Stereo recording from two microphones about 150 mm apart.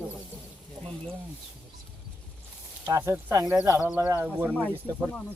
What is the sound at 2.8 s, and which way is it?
Speech, 20° right (ahead or behind).